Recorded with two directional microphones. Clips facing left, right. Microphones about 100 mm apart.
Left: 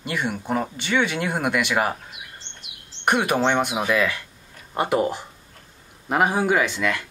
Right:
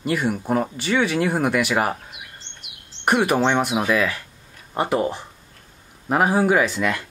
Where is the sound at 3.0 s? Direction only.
5° right (ahead or behind).